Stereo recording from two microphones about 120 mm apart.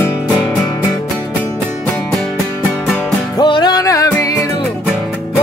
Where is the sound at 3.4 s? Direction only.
35° left (ahead or behind).